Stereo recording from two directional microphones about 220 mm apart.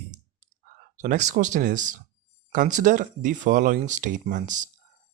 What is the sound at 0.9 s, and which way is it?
Speech, 35° right (ahead or behind).